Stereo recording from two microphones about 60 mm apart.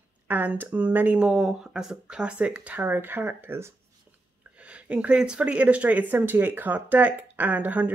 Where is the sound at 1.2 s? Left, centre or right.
Centre; by 3.7 s right.